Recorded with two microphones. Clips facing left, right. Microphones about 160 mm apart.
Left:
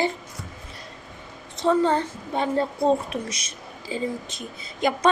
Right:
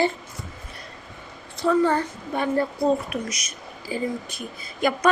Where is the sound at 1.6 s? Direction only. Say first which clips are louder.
Even; 25° left (ahead or behind).